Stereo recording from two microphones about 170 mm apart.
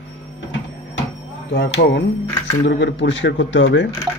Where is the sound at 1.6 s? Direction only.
85° left.